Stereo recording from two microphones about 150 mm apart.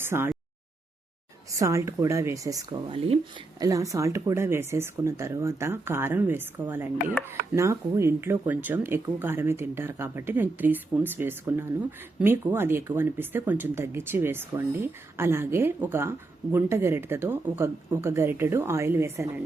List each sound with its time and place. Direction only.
0.0 s a sound: 15° right (ahead or behind)
1.5 s speech: 20° right (ahead or behind)
3.6 s speech: 20° right (ahead or behind)